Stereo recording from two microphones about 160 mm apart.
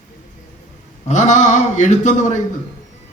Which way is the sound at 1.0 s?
50° left (ahead or behind).